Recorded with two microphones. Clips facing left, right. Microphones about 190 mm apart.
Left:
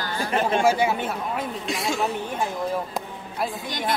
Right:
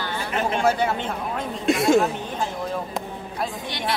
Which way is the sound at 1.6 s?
55° right (ahead or behind).